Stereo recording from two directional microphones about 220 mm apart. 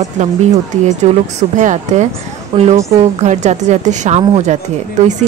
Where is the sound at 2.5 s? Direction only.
20° right (ahead or behind).